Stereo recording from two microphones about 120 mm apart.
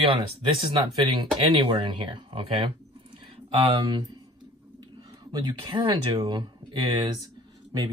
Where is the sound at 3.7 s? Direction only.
40° right (ahead or behind).